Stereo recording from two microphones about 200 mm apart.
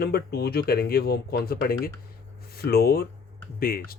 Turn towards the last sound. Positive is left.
turn(degrees=45)  # may be behind; listen again after turning